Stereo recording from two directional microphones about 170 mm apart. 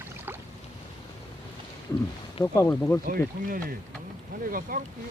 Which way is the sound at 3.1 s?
60° right (ahead or behind).